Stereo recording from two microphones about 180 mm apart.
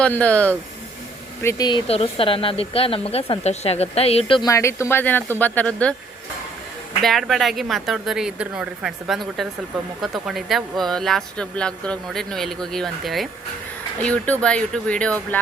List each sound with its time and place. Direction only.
0.0 s speech: 5° left (ahead or behind)
1.9 s speech: 30° left (ahead or behind)
4.4 s speech: 15° left (ahead or behind)
7.0 s speech: centre (ahead or behind)